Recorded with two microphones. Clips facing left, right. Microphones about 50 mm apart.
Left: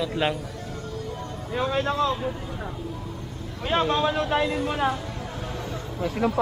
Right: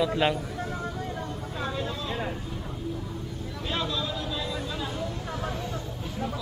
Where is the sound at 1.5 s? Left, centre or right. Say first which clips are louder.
Left 9 dB; left.